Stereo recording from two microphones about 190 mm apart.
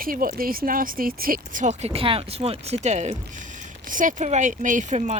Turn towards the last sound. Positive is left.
turn(degrees=-40)  # may be behind; listen again after turning